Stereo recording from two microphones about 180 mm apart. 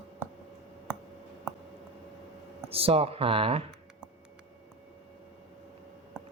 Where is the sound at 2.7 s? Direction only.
30° right (ahead or behind).